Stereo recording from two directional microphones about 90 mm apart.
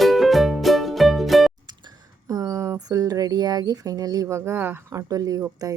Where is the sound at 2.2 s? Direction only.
40° right (ahead or behind).